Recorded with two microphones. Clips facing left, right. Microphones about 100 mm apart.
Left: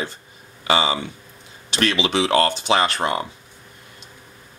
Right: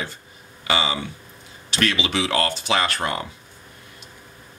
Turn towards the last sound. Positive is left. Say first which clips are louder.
# left 3 dB
turn(degrees=25)  # may be behind; listen again after turning